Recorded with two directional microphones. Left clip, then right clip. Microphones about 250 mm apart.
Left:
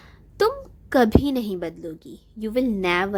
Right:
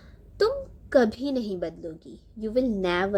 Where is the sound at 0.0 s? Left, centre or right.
Left.